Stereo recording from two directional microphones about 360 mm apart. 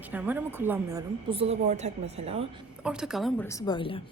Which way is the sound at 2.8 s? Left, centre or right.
Centre.